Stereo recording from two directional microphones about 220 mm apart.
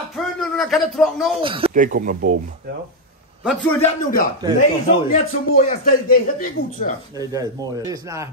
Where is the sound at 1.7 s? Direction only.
35° right (ahead or behind).